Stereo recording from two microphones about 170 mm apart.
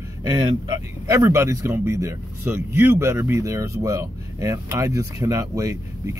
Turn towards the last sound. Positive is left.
turn(degrees=-20)  # may be behind; listen again after turning